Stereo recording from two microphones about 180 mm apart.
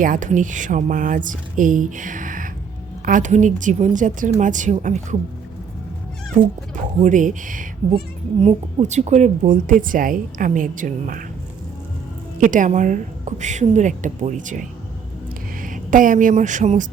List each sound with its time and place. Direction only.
0.0 s speech: 45° right (ahead or behind)
7.0 s speech: 45° right (ahead or behind)
12.4 s speech: 45° right (ahead or behind)
15.6 s speech: 50° right (ahead or behind)